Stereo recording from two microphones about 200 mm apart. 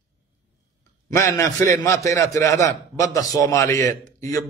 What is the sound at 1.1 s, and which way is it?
A man's voice, 15° left (ahead or behind).